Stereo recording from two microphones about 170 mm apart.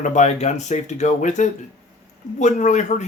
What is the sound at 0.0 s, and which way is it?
Speech, 45° left (ahead or behind).